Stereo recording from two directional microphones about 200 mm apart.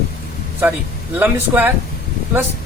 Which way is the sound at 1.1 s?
10° right (ahead or behind).